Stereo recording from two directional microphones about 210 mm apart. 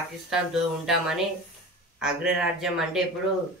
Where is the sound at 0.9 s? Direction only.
Centre (ahead or behind).